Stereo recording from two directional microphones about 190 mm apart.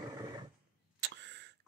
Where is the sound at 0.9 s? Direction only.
65° right (ahead or behind).